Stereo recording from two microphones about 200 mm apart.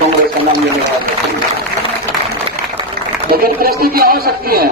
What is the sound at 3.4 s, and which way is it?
A man's voice, 50° right (ahead or behind).